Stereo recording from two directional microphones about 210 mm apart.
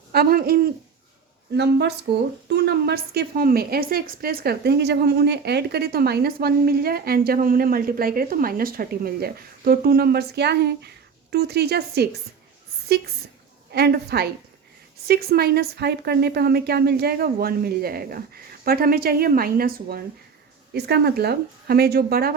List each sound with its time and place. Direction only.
0.1 s hoot: 45° right (ahead or behind)
1.5 s a woman's voice: 55° right (ahead or behind)
13.7 s a woman's voice: 50° right (ahead or behind)